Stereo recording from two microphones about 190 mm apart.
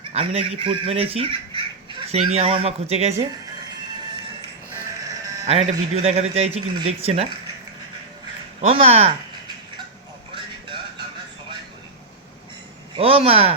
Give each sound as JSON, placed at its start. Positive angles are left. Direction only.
{"t": 0.0, "sound": "speech", "side_deg": -30}
{"t": 5.9, "sound": "speech", "side_deg": -35}
{"t": 8.6, "sound": "speech", "side_deg": -30}
{"t": 13.0, "sound": "speech", "side_deg": -30}